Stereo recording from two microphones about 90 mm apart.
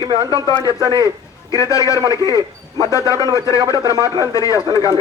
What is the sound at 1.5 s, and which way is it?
Speech, 35° left (ahead or behind).